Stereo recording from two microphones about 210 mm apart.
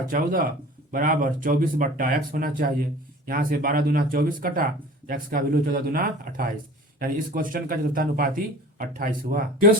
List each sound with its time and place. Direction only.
0.1 s speech: 45° right (ahead or behind)